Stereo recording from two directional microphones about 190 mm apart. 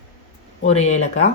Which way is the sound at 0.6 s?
35° left (ahead or behind).